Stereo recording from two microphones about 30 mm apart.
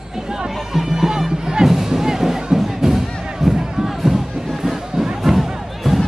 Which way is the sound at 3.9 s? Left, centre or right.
Centre.